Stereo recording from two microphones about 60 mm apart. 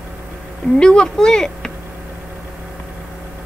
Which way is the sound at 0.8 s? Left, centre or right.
Centre.